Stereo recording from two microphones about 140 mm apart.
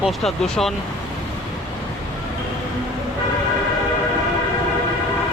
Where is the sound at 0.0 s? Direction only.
Centre (ahead or behind).